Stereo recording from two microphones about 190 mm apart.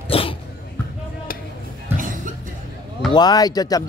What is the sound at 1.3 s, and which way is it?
Music, 50° left (ahead or behind).